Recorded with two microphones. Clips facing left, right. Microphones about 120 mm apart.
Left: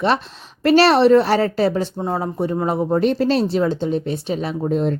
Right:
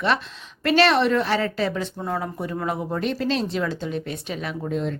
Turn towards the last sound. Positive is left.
turn(degrees=40)  # may be behind; listen again after turning